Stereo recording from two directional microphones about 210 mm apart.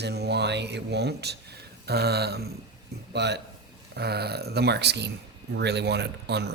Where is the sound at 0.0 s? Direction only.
50° right (ahead or behind).